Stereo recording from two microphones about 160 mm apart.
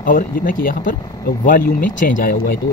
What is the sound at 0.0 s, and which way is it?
Speech, 60° left (ahead or behind).